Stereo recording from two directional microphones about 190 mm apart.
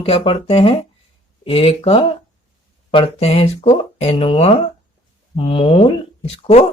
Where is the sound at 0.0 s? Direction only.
30° left (ahead or behind).